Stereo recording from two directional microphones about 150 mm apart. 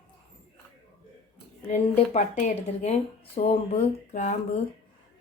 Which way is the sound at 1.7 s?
50° left (ahead or behind).